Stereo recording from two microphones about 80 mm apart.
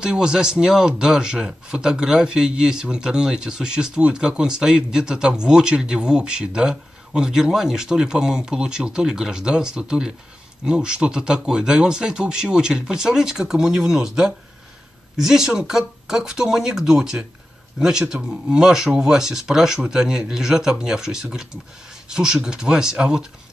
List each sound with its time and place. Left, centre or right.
0.0 s a man's voice: centre